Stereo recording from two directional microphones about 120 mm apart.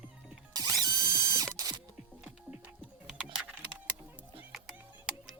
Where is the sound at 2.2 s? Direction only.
10° right (ahead or behind).